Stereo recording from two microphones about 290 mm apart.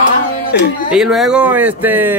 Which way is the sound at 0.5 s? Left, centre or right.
Left.